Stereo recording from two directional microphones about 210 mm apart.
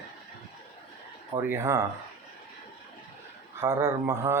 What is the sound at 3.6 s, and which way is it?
Speech, 15° right (ahead or behind).